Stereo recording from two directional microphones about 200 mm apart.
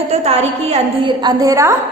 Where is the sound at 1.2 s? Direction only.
15° right (ahead or behind).